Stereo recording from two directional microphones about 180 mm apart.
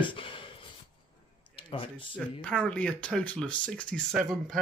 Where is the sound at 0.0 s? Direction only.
30° left (ahead or behind).